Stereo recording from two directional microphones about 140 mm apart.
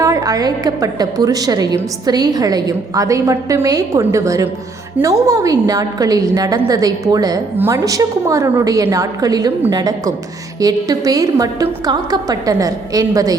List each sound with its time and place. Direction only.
0.0 s a woman's voice: 25° right (ahead or behind)